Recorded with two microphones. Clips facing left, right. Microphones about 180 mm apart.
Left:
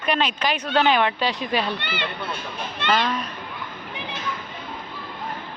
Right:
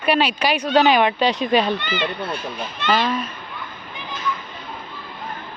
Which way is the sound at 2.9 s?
Centre (ahead or behind).